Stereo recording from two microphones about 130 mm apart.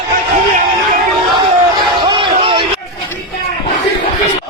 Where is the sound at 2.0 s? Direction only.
40° right (ahead or behind).